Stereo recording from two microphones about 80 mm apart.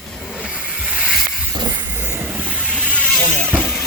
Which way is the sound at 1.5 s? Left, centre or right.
Right.